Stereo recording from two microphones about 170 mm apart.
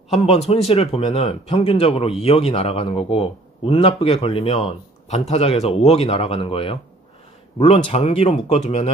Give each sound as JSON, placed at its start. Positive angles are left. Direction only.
{"t": 0.1, "sound": "speech", "side_deg": 40}